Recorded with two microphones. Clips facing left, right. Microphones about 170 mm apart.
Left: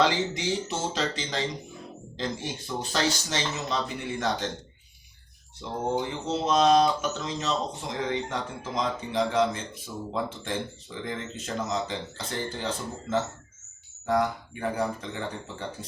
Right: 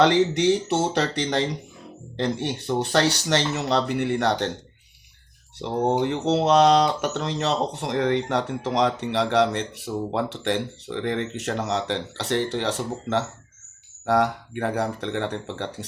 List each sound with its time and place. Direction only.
0.0 s speech: 65° right (ahead or behind)
5.5 s speech: 70° right (ahead or behind)